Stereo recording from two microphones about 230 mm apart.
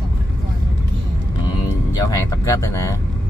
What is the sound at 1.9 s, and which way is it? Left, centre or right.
Vehicle, centre.